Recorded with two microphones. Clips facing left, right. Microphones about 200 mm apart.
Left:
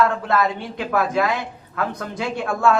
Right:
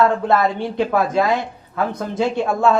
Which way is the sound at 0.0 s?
30° right (ahead or behind).